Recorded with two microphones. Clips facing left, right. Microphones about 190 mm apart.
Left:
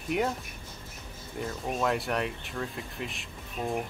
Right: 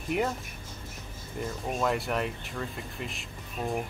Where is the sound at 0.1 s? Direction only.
Centre (ahead or behind).